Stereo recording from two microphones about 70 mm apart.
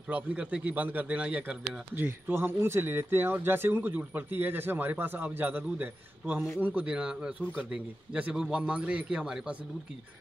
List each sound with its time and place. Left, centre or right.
0.1 s speech: centre
2.0 s speech: right; by 9.6 s centre